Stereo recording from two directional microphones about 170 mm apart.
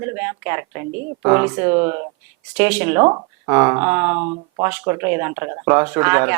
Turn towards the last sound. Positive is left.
turn(degrees=-10)  # may be behind; listen again after turning